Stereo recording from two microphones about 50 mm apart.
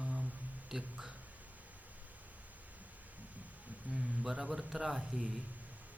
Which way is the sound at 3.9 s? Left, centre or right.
Right.